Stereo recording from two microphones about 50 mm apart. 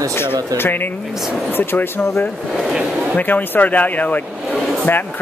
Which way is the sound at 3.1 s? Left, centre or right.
Left.